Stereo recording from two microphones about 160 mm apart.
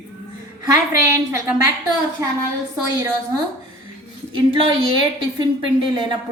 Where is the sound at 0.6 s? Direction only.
20° right (ahead or behind).